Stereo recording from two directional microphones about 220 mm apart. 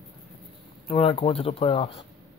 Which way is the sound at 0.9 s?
25° left (ahead or behind).